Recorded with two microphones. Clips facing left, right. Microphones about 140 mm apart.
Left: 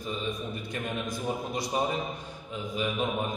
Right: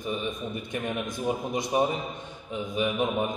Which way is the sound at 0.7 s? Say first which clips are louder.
Right 2 dB; 20° right (ahead or behind).